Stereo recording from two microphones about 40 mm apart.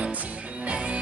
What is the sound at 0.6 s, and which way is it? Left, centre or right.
Music, right.